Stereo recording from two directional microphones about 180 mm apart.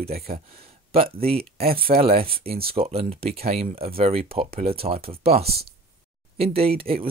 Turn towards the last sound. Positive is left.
turn(degrees=-30)  # may be behind; listen again after turning